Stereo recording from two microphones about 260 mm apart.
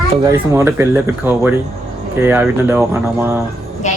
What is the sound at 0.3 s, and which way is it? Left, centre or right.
Speech, centre.